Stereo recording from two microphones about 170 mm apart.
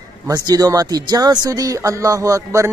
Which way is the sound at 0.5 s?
20° right (ahead or behind).